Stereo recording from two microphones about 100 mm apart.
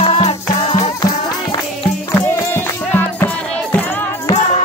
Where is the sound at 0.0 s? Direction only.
85° left.